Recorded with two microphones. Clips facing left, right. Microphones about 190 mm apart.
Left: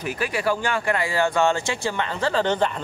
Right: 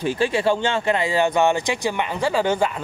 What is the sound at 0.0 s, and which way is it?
Speech, 30° right (ahead or behind).